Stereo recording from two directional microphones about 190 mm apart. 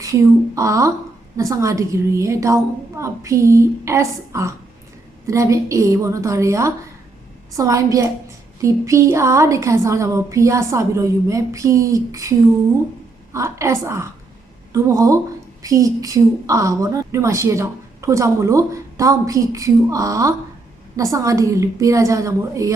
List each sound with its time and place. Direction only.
0.0 s a woman's voice: 15° right (ahead or behind)
13.3 s a woman's voice: 15° right (ahead or behind)